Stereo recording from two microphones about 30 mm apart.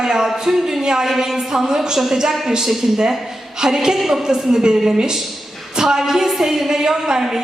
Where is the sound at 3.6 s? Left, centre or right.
Right.